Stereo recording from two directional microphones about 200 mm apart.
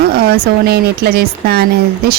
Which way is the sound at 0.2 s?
50° right (ahead or behind).